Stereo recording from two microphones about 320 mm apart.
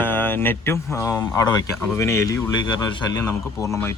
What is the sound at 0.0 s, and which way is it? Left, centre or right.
Speech, centre.